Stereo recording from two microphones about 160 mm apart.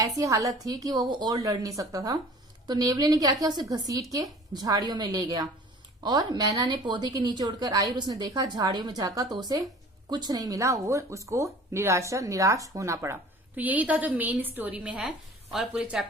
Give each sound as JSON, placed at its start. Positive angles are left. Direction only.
{"t": 0.0, "sound": "a woman's voice", "side_deg": -20}